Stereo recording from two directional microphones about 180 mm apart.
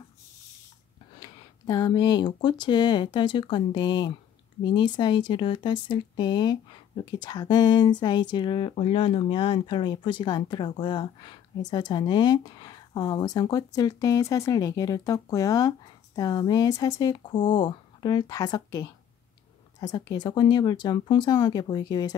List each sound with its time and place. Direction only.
1.2 s speech: 20° left (ahead or behind)